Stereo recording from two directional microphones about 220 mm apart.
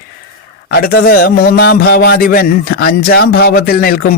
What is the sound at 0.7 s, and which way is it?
A man's voice, 45° left (ahead or behind).